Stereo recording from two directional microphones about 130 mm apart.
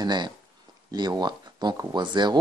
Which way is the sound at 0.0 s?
35° right (ahead or behind).